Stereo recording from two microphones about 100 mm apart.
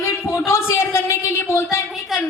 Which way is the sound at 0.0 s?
25° left (ahead or behind).